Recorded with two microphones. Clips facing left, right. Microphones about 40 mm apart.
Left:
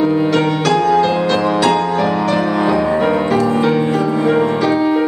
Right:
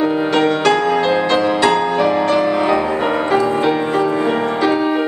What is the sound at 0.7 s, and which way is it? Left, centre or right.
Music, centre.